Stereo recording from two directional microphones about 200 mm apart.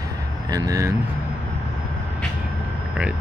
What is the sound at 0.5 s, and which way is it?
Speech, 20° right (ahead or behind).